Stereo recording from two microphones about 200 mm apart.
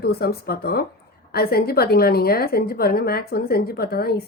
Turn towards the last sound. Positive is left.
turn(degrees=50)  # may be behind; listen again after turning